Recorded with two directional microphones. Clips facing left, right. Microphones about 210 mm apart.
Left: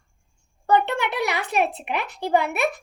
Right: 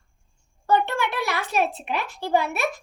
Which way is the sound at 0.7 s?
20° left (ahead or behind).